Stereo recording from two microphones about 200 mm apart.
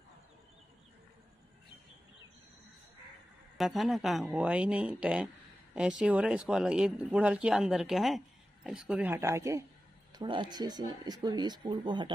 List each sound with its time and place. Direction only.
3.5 s speech: centre (ahead or behind); by 11.8 s 20° right (ahead or behind)